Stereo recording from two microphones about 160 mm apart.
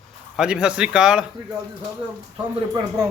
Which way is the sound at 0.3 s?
5° right (ahead or behind).